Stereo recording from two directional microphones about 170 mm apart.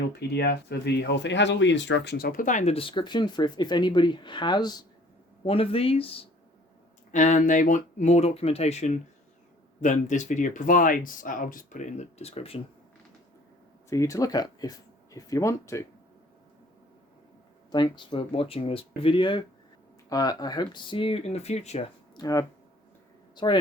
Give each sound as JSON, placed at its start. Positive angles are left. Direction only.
{"t": 0.2, "sound": "speech", "side_deg": 75}
{"t": 7.1, "sound": "speech", "side_deg": 45}
{"t": 13.9, "sound": "speech", "side_deg": 20}
{"t": 17.7, "sound": "speech", "side_deg": 25}
{"t": 22.1, "sound": "speech", "side_deg": 20}